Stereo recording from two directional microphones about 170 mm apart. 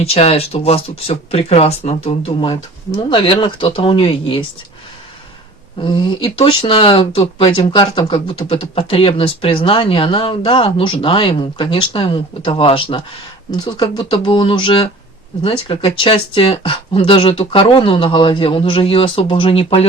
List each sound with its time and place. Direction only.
0.0 s speech: 35° left (ahead or behind)
5.8 s speech: 30° left (ahead or behind)